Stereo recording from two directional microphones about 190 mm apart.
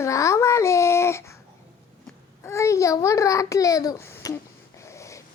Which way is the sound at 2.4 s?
15° left (ahead or behind).